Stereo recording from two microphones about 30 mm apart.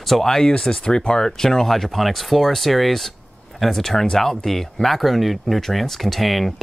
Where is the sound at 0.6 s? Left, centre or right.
Left.